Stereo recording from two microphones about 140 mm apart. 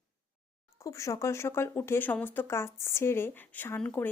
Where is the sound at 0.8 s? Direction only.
20° left (ahead or behind).